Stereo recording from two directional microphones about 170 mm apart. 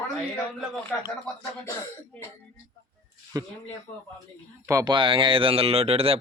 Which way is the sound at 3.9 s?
45° left (ahead or behind).